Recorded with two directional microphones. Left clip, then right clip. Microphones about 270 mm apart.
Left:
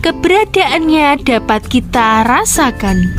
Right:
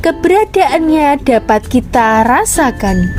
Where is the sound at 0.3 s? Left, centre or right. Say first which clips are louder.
Even; left.